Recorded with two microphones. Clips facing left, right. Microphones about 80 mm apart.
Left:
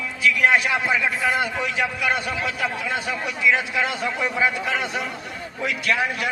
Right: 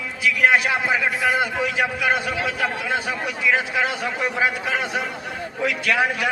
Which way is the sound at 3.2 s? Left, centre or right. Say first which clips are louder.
Even; right.